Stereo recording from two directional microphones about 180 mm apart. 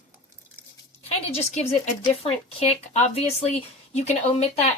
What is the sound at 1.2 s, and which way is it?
Speech, 35° left (ahead or behind).